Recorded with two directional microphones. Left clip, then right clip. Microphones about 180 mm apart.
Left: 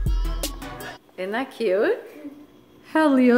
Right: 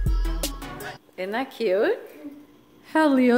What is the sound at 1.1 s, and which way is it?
A woman's voice, 5° right (ahead or behind).